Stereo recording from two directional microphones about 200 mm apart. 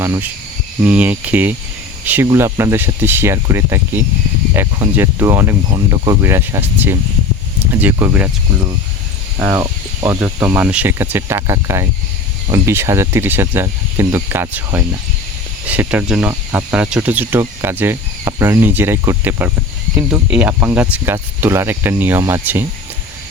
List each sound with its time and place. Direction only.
0.0 s cricket: 10° right (ahead or behind)
0.9 s speech: 10° right (ahead or behind)
9.4 s speech: 10° right (ahead or behind)